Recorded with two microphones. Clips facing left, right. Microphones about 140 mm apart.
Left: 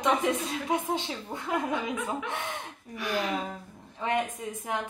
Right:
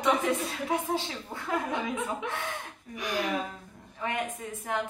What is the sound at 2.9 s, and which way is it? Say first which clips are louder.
Speech: left 2 dB; 15° right (ahead or behind).